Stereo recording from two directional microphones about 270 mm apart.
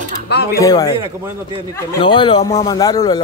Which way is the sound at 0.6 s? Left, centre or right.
Centre.